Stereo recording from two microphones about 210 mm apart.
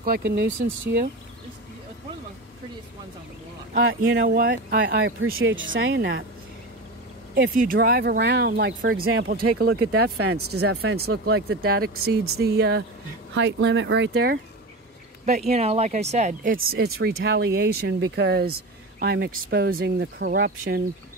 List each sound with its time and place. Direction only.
0.0 s speech: 50° right (ahead or behind)
3.8 s speech: 65° right (ahead or behind)
7.3 s speech: 45° right (ahead or behind)
10.1 s speech: 90° right
10.5 s speech: 50° right (ahead or behind)
15.2 s speech: 30° right (ahead or behind)
16.6 s speech: 50° right (ahead or behind)